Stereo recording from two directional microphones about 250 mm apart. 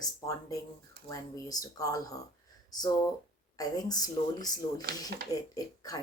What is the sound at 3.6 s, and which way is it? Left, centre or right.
Speech, centre.